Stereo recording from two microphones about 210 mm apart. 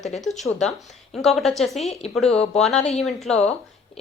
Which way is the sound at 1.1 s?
Centre (ahead or behind).